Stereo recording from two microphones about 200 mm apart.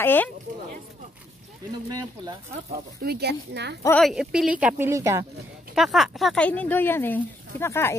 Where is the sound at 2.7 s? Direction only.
50° right (ahead or behind).